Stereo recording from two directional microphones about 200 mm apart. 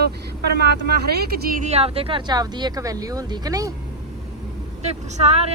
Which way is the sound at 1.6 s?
30° right (ahead or behind).